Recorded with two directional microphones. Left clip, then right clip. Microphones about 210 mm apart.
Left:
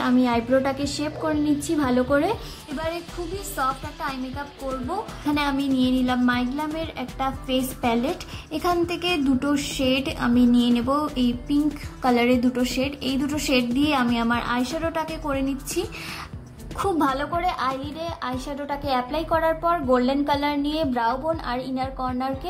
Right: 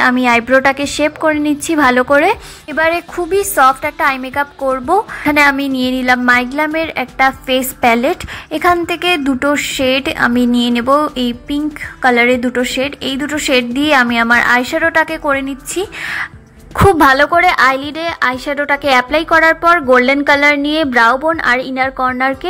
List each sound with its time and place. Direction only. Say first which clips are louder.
0.0 s a woman's voice: right 11 dB; 20° right (ahead or behind)
3.5 s a woman's voice: right 15 dB; 30° right (ahead or behind); by 16.3 s 10° right (ahead or behind)
16.7 s a woman's voice: right 15 dB; 25° right (ahead or behind)